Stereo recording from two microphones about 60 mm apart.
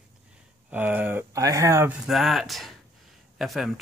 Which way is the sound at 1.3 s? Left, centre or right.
Right.